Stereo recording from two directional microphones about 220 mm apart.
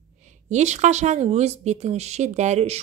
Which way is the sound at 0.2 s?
35° right (ahead or behind).